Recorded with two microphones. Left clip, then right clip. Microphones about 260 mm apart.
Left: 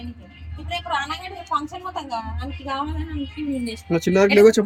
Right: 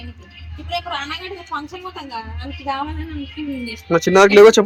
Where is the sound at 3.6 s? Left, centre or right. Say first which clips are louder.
Right 8 dB; centre.